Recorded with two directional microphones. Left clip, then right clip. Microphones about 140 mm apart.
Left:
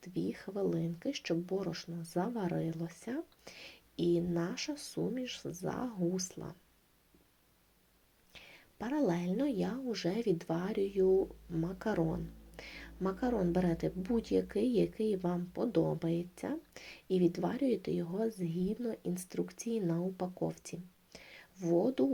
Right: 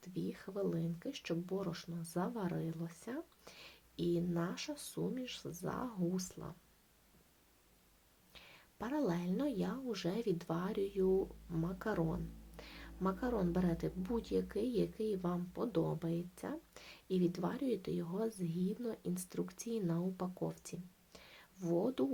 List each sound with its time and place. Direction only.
0.0 s speech: 15° left (ahead or behind)
8.3 s a woman's voice: 10° left (ahead or behind)